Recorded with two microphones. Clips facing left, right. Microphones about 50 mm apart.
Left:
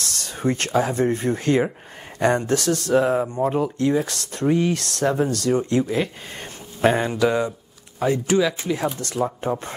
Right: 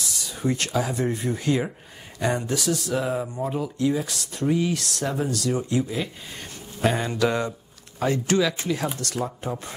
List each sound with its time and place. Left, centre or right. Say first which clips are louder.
0.0 s a sound: left 2 dB; left
0.4 s speech: left 4 dB; left
2.9 s speech: left 7 dB; left
5.0 s speech: left 6 dB; left
7.2 s speech: left 3 dB; centre; by 9.8 s left